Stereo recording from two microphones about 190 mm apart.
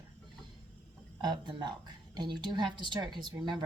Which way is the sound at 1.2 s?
25° right (ahead or behind).